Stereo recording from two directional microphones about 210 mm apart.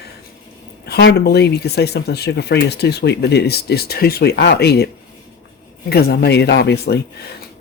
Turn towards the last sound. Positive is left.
turn(degrees=50)  # may be behind; listen again after turning